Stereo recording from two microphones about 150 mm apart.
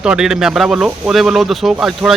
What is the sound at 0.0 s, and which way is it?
Speech, 5° right (ahead or behind).